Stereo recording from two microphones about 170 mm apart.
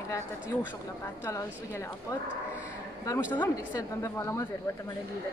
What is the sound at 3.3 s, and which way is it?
Speech, 15° left (ahead or behind).